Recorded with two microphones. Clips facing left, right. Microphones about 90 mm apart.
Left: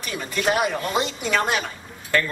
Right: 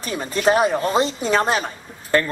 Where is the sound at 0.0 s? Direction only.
35° right (ahead or behind).